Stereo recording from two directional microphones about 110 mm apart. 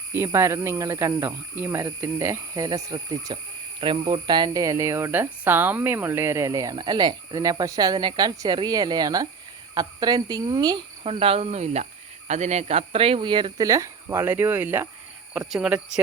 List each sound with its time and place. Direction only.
0.3 s speech: 25° right (ahead or behind)
2.6 s speech: 40° right (ahead or behind)
3.8 s speech: 50° right (ahead or behind)
11.0 s speech: 60° right (ahead or behind)
13.6 s speech: 30° right (ahead or behind)
14.3 s speech: 20° right (ahead or behind)
15.3 s speech: 5° right (ahead or behind)